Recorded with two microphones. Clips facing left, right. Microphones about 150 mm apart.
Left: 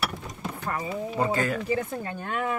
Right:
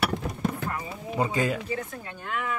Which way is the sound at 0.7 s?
75° left (ahead or behind).